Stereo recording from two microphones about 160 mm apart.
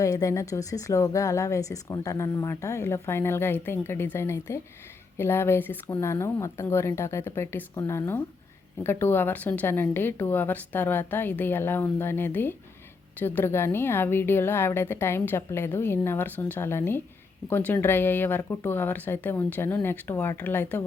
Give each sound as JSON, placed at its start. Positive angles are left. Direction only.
{"t": 0.0, "sound": "a woman's voice", "side_deg": 20}